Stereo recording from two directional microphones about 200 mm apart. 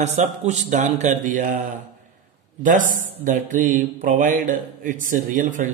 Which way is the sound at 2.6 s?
40° right (ahead or behind).